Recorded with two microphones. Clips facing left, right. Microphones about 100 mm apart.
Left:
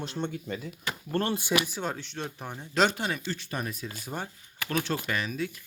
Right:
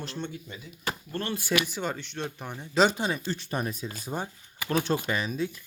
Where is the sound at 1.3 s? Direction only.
20° left (ahead or behind).